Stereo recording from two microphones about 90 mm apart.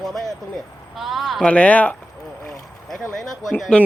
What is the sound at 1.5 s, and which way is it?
Speech, 15° left (ahead or behind).